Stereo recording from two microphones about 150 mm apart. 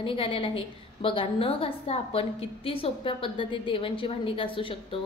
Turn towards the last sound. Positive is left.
turn(degrees=35)  # may be behind; listen again after turning